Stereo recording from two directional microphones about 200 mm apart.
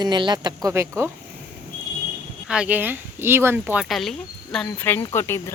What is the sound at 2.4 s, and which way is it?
Speech, 5° right (ahead or behind).